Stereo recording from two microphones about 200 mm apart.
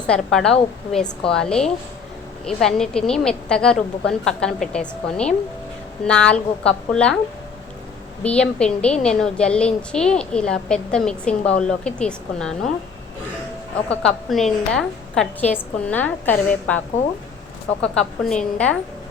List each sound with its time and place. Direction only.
0.1 s a woman's voice: centre (ahead or behind)
8.2 s a woman's voice: 5° left (ahead or behind)
14.0 s a woman's voice: centre (ahead or behind)